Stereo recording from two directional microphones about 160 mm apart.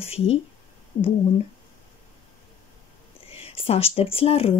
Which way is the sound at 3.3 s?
35° left (ahead or behind).